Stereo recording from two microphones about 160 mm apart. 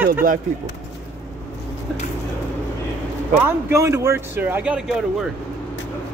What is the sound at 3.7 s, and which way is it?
Speech, 15° right (ahead or behind).